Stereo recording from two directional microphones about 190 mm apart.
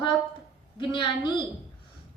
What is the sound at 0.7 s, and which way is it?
Speech, 25° left (ahead or behind).